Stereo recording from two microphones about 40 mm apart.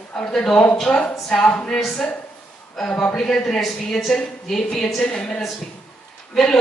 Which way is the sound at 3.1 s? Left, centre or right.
Centre.